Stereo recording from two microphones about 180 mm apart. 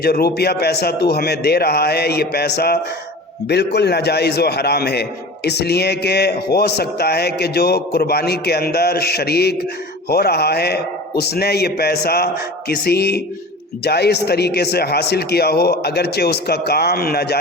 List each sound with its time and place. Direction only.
0.0 s a man's voice: 60° left (ahead or behind)